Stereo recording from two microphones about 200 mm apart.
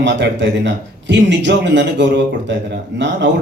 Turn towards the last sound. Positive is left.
turn(degrees=-60)  # may be behind; listen again after turning